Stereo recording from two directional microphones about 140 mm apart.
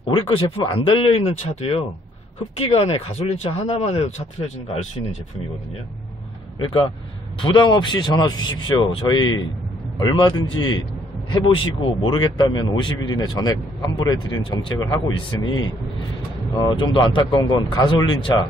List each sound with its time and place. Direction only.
0.3 s speech: 40° left (ahead or behind)
6.6 s speech: 35° left (ahead or behind)